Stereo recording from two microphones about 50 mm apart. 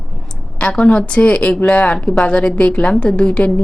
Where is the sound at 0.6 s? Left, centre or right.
Left.